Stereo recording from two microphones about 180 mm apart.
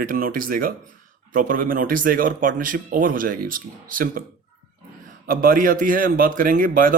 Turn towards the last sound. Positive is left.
turn(degrees=-50)  # may be behind; listen again after turning